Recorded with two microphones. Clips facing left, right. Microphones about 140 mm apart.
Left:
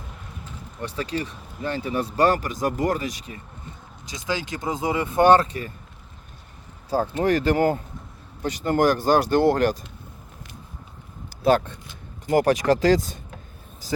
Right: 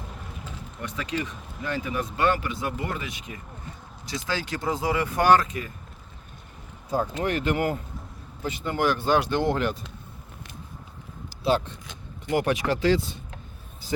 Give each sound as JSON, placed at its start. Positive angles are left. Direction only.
{"t": 0.8, "sound": "speech", "side_deg": 35}
{"t": 4.0, "sound": "speech", "side_deg": 20}
{"t": 6.9, "sound": "speech", "side_deg": 30}
{"t": 11.4, "sound": "speech", "side_deg": 45}